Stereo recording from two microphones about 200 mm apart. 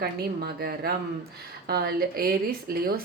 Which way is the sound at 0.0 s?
50° right (ahead or behind).